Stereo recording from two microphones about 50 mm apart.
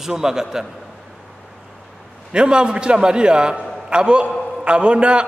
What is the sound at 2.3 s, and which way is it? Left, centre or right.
A man's voice, centre.